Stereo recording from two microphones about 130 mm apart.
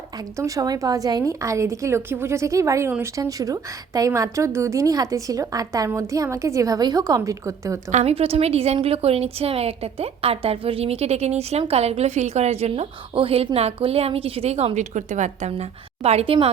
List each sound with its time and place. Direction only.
0.2 s a woman's voice: 25° right (ahead or behind)
7.9 s a woman's voice: 55° right (ahead or behind)